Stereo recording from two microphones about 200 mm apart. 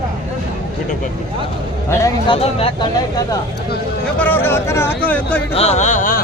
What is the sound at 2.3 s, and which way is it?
Speech, 25° left (ahead or behind).